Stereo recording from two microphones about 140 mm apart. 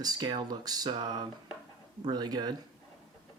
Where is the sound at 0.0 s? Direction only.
30° right (ahead or behind).